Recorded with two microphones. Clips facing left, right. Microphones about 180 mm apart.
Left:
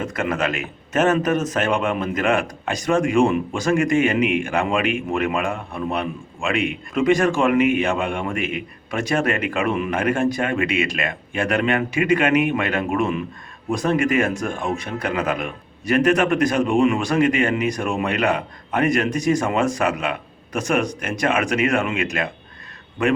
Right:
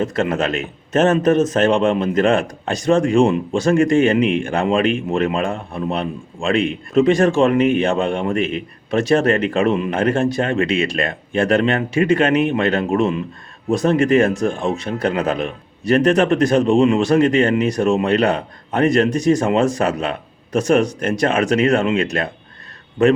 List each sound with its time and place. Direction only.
0.0 s a man's voice: 30° right (ahead or behind)